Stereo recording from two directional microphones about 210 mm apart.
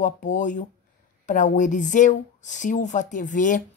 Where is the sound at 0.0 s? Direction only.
35° left (ahead or behind).